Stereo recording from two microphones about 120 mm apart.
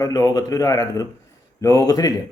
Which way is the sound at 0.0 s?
30° left (ahead or behind).